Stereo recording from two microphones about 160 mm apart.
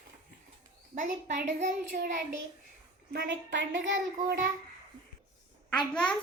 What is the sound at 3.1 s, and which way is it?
Speech, 90° right.